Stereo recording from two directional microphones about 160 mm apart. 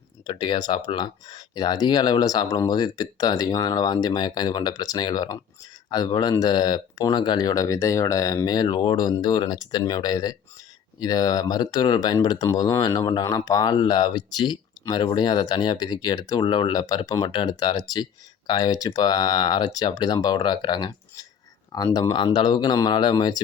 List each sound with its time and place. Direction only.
0.3 s speech: 30° left (ahead or behind)